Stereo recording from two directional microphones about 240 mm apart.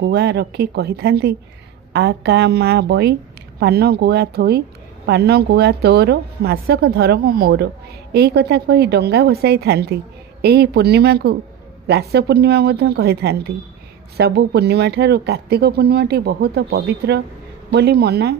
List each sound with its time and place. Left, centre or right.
0.0 s speech: right